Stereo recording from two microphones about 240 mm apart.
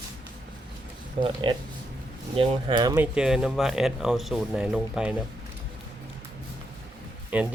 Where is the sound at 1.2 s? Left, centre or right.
Right.